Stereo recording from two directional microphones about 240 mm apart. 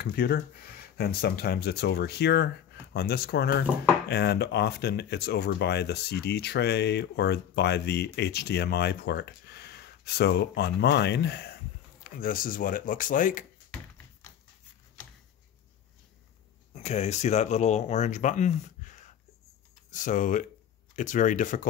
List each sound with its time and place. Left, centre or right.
0.0 s speech: left
16.7 s speech: left